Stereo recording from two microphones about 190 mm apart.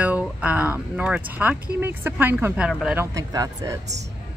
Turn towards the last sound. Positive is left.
turn(degrees=-20)  # may be behind; listen again after turning